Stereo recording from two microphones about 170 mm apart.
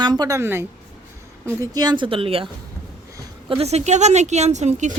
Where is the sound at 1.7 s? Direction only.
25° right (ahead or behind).